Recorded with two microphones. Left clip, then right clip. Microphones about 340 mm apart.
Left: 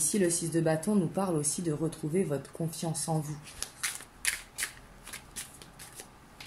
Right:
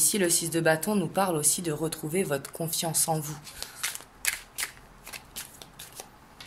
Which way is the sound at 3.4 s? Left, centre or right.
Centre.